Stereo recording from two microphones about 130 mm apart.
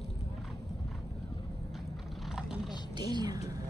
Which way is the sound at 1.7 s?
Centre (ahead or behind).